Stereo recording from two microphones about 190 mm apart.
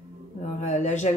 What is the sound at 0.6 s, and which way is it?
Speech, 40° left (ahead or behind).